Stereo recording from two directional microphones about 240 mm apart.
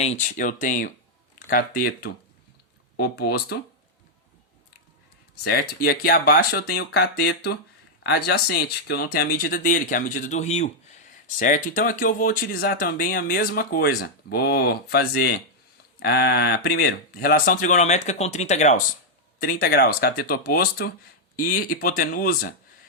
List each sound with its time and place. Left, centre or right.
0.0 s speech: left
5.4 s speech: left